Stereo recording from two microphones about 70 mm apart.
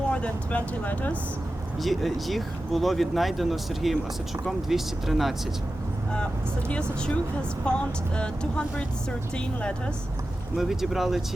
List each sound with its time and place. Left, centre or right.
0.1 s speech: centre
1.8 s speech: centre
6.7 s speech: centre
10.6 s speech: centre